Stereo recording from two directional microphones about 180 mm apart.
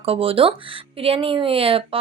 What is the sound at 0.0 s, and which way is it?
A woman's voice, 30° right (ahead or behind).